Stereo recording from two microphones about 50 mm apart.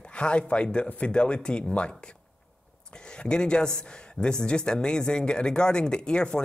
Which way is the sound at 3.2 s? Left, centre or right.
Centre.